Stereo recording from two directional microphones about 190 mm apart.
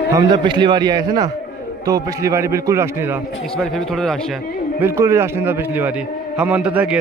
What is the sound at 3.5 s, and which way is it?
Speech, 5° left (ahead or behind).